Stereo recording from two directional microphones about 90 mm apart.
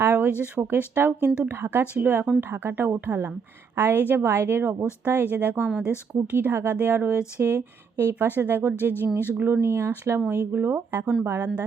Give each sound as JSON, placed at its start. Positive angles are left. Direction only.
{"t": 0.0, "sound": "a sound", "side_deg": -20}
{"t": 0.6, "sound": "speech", "side_deg": -25}
{"t": 6.3, "sound": "speech", "side_deg": -25}
{"t": 11.0, "sound": "speech", "side_deg": -10}